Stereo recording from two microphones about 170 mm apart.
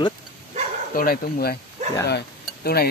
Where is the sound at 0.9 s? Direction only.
55° left (ahead or behind).